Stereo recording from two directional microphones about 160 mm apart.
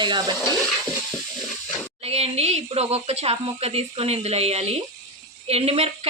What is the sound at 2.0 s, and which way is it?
A woman's voice, 40° right (ahead or behind).